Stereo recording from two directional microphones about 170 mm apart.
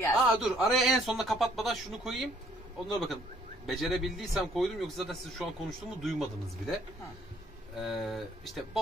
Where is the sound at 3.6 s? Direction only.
Centre (ahead or behind).